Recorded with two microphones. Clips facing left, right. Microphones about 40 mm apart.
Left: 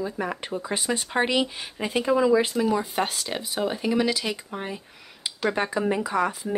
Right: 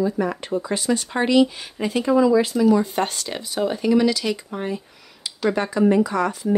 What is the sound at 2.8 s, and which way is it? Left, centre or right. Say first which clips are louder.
Speech: right 3 dB; centre.